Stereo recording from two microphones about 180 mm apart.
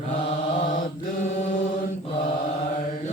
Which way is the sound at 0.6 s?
45° left (ahead or behind).